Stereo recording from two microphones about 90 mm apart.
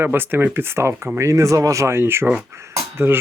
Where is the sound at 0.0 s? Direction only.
25° right (ahead or behind).